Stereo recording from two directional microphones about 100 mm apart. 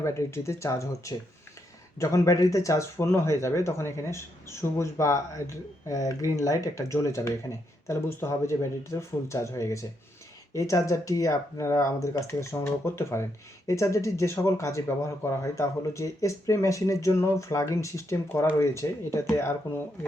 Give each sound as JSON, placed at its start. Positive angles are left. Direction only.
{"t": 0.0, "sound": "speech", "side_deg": 25}